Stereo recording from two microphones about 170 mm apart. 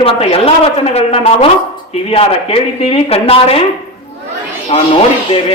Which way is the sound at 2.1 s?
35° left (ahead or behind).